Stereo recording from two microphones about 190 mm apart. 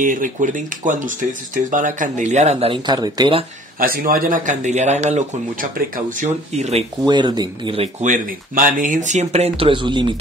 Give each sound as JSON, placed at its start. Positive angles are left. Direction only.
{"t": 0.0, "sound": "speech", "side_deg": -45}
{"t": 3.8, "sound": "speech", "side_deg": -50}
{"t": 7.0, "sound": "speech", "side_deg": -20}